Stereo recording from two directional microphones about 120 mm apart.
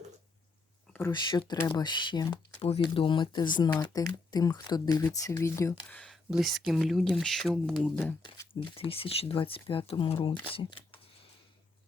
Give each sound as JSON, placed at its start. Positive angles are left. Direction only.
{"t": 1.1, "sound": "speech", "side_deg": 40}
{"t": 2.6, "sound": "speech", "side_deg": 55}
{"t": 6.3, "sound": "speech", "side_deg": 0}
{"t": 8.7, "sound": "speech", "side_deg": 50}
{"t": 10.2, "sound": "speech", "side_deg": 45}